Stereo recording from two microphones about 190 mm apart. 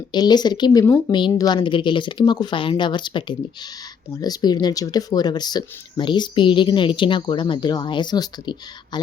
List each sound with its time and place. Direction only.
0.1 s speech: 20° left (ahead or behind)